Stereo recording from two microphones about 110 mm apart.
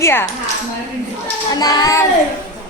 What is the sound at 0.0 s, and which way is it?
Speech, 20° left (ahead or behind).